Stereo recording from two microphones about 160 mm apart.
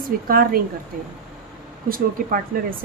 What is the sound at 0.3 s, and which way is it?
Speech, 65° right (ahead or behind).